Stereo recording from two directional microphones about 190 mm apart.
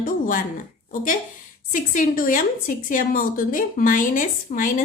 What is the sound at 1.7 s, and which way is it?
A woman's voice, 45° left (ahead or behind).